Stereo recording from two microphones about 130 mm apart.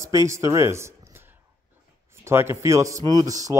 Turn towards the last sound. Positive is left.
turn(degrees=-25)  # may be behind; listen again after turning